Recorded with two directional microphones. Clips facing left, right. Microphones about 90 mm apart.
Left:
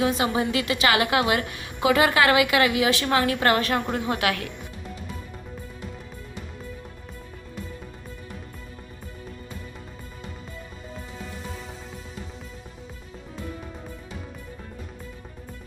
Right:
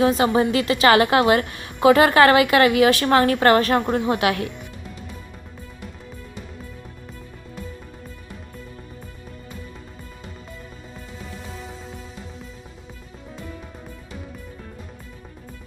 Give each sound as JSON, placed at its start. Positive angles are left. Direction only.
{"t": 0.0, "sound": "a woman's voice", "side_deg": -40}